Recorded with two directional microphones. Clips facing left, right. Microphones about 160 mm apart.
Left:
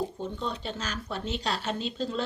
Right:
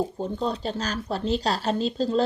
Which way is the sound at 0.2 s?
35° right (ahead or behind).